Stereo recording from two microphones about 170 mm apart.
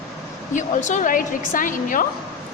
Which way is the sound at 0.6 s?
45° left (ahead or behind).